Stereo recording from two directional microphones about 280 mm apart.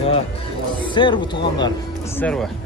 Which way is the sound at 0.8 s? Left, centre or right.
Centre.